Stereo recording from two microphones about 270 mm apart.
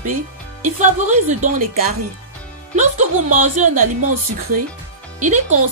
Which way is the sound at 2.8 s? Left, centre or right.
Right.